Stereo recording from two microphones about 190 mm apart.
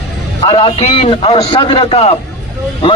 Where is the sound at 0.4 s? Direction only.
30° left (ahead or behind).